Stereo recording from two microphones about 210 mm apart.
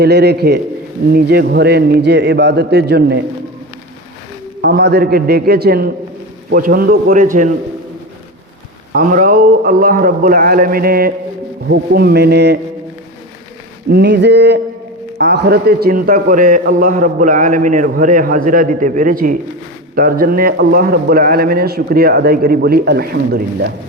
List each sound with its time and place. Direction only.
0.0 s a man's voice: 50° right (ahead or behind)
4.6 s a man's voice: 50° right (ahead or behind)
8.9 s a man's voice: 40° right (ahead or behind)
13.9 s a man's voice: 55° right (ahead or behind)